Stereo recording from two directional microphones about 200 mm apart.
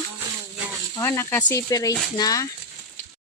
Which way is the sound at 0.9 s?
15° left (ahead or behind).